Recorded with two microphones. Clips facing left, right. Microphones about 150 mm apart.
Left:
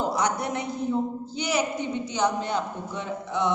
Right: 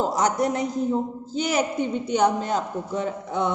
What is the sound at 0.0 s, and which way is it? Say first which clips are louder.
A man's voice: right 4 dB; 40° right (ahead or behind).